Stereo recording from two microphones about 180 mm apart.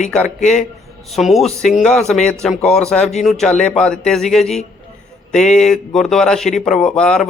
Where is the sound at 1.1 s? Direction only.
Centre (ahead or behind).